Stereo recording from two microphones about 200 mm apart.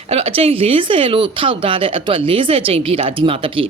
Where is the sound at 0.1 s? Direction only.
30° right (ahead or behind).